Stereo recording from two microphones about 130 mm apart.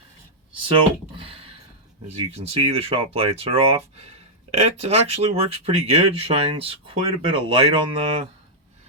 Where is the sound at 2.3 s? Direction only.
55° right (ahead or behind).